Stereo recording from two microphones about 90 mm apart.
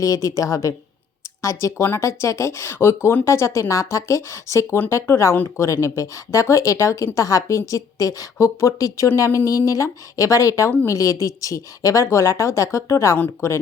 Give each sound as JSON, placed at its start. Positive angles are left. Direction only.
{"t": 0.0, "sound": "speech", "side_deg": 40}